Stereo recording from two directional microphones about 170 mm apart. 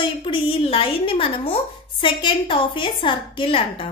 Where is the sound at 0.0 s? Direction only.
30° left (ahead or behind).